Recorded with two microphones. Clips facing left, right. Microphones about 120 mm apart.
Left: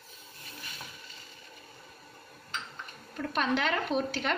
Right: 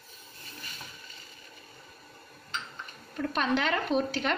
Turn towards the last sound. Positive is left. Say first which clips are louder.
# right 2 dB
turn(degrees=0)  # may be behind; listen again after turning